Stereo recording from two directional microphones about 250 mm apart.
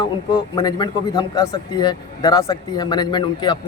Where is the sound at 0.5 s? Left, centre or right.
Centre.